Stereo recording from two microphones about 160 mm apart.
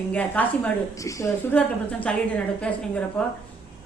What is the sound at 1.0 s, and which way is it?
Speech, 20° left (ahead or behind).